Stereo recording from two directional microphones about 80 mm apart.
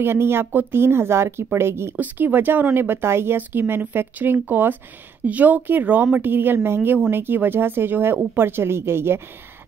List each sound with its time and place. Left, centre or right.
0.0 s speech: right